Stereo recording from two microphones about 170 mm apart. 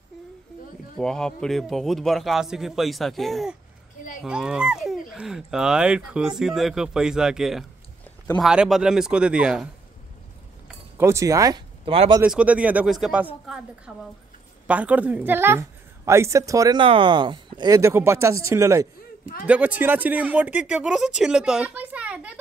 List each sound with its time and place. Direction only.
0.9 s speech: 5° left (ahead or behind)
11.0 s speech: 15° right (ahead or behind)
11.8 s speech: 35° right (ahead or behind)
12.2 s a woman's voice: 5° right (ahead or behind)